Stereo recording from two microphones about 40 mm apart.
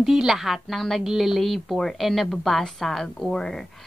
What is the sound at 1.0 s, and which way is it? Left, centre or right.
A woman's voice, centre.